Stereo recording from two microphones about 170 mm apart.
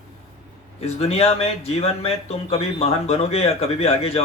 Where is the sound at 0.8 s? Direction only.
35° left (ahead or behind).